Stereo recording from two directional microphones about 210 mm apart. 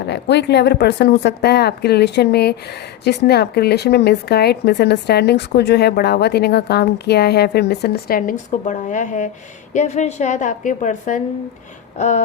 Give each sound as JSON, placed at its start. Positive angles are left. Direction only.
{"t": 0.0, "sound": "a woman's voice", "side_deg": 55}